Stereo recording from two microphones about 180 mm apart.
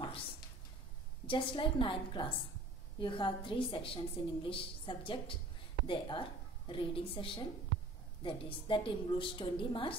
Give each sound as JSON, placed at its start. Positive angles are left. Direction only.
{"t": 1.2, "sound": "a woman's voice", "side_deg": 30}